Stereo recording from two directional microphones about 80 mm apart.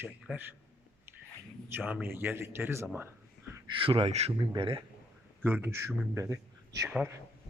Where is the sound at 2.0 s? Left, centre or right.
Right.